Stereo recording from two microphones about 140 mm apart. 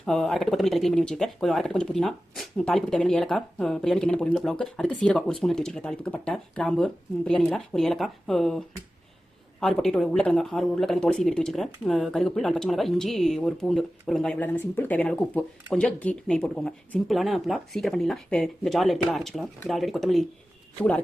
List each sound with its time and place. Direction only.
0.0 s speech: 5° left (ahead or behind)